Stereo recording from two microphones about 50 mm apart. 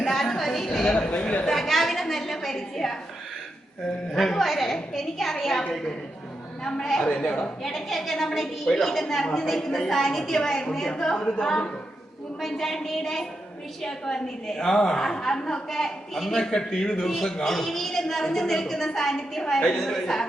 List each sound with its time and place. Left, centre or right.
0.0 s a sound: centre
0.9 s a man's voice: left
1.5 s a sound: centre
4.1 s a woman's voice: centre
6.7 s a woman's voice: centre
7.6 s a woman's voice: centre
12.4 s a woman's voice: centre